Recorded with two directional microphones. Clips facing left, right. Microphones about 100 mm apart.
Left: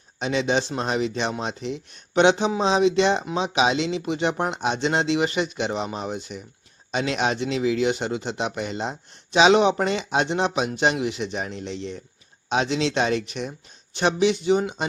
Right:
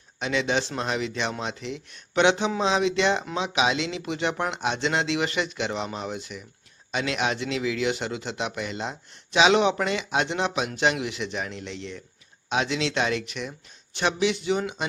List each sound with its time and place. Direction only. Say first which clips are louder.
0.2 s speech: left 3 dB; 25° left (ahead or behind)